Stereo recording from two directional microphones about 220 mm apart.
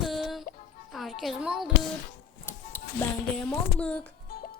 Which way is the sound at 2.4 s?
10° left (ahead or behind).